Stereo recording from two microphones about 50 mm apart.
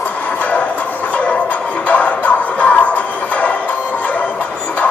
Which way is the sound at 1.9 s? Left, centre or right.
Left.